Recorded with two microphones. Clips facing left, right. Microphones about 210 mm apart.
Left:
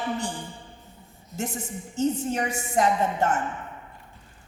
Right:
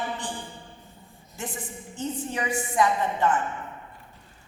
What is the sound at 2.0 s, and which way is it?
A man's voice, 45° left (ahead or behind).